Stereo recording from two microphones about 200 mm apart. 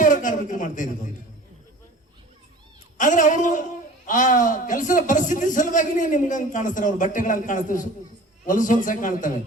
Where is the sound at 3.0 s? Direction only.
40° left (ahead or behind).